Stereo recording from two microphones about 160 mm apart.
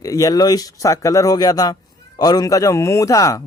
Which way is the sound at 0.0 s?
20° left (ahead or behind).